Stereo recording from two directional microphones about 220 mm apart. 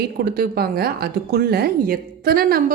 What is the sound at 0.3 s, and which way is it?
A woman's voice, 45° right (ahead or behind).